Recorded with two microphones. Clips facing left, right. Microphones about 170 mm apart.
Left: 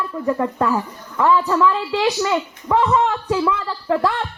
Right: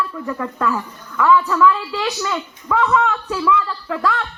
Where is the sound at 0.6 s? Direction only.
35° left (ahead or behind).